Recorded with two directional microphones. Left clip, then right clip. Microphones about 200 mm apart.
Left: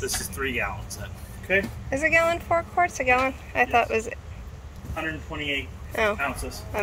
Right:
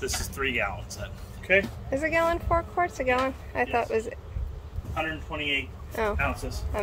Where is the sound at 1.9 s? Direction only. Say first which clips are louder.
Left 4 dB; 10° right (ahead or behind).